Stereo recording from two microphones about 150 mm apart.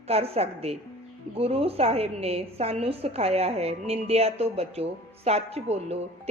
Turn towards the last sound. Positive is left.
turn(degrees=-45)  # may be behind; listen again after turning